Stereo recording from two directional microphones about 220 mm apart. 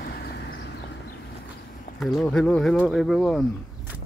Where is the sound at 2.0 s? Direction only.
Centre (ahead or behind).